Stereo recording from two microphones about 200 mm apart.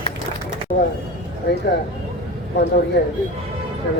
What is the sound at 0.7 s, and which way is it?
Speech, 50° left (ahead or behind).